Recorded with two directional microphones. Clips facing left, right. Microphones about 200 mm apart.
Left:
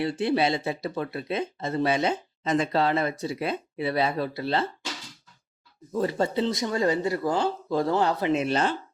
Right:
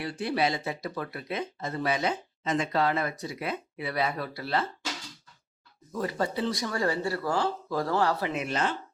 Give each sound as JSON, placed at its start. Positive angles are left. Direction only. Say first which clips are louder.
{"t": 0.0, "sound": "speech", "louder": "left 4 dB", "side_deg": 25}
{"t": 5.9, "sound": "speech", "louder": "left 5 dB", "side_deg": 25}